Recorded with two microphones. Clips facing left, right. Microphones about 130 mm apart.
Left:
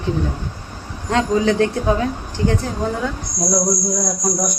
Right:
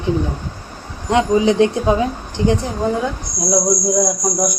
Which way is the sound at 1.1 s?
15° right (ahead or behind).